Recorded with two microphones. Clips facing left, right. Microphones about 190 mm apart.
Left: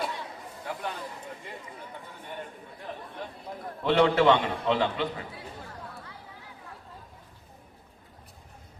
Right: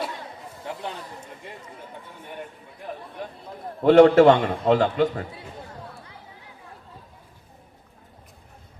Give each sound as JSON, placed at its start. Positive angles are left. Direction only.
{"t": 3.8, "sound": "a man's voice", "side_deg": -45}